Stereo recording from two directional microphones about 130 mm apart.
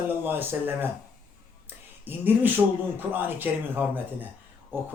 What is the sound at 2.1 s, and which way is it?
Speech, 15° right (ahead or behind).